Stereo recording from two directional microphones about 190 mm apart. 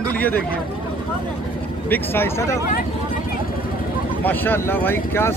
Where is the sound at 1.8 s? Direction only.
10° left (ahead or behind).